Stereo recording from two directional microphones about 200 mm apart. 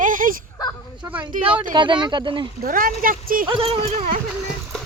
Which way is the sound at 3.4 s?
25° right (ahead or behind).